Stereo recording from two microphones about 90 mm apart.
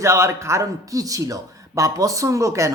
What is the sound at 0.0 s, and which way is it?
Speech, 30° right (ahead or behind).